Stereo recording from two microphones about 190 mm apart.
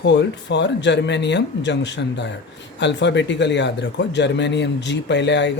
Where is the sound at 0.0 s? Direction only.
65° left (ahead or behind).